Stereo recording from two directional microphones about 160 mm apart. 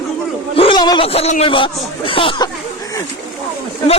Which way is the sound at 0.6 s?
30° left (ahead or behind).